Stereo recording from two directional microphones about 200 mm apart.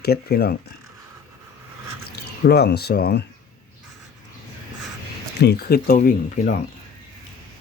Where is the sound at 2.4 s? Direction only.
50° left (ahead or behind).